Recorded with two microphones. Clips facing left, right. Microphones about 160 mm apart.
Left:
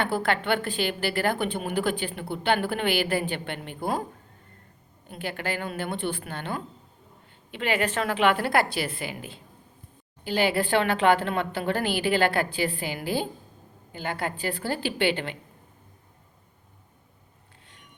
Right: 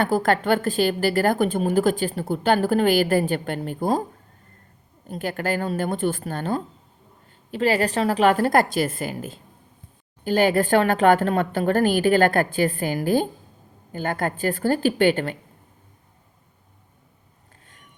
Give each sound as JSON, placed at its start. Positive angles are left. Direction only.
{"t": 0.0, "sound": "a woman's voice", "side_deg": -40}
{"t": 5.0, "sound": "a woman's voice", "side_deg": -40}